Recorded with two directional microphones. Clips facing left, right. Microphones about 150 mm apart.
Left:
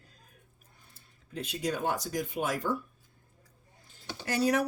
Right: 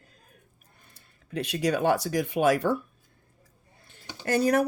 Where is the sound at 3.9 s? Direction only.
60° right (ahead or behind).